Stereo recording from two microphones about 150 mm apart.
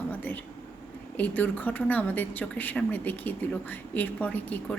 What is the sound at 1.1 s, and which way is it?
A woman's voice, 10° left (ahead or behind).